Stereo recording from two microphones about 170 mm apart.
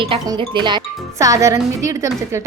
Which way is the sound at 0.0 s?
30° right (ahead or behind).